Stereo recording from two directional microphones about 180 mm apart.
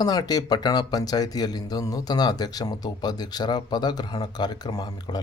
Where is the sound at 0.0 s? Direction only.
20° left (ahead or behind).